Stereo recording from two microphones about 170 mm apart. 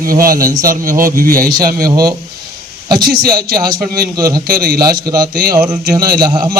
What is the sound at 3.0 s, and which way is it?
Speech, 65° right (ahead or behind).